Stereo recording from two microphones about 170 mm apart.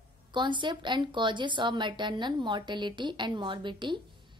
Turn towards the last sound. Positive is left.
turn(degrees=-25)  # may be behind; listen again after turning